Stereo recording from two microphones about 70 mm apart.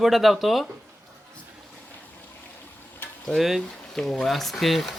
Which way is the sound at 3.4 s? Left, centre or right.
Centre.